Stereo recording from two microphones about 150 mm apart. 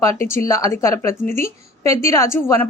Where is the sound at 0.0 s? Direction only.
20° left (ahead or behind).